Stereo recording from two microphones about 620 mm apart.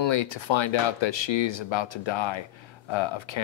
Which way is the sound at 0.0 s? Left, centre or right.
Left.